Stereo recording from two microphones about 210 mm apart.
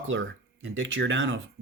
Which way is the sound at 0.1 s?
60° right (ahead or behind).